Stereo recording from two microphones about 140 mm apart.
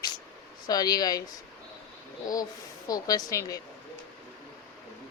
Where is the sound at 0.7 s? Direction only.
25° left (ahead or behind).